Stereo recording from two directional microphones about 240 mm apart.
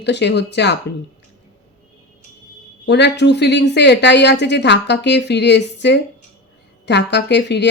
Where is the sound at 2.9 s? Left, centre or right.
Left.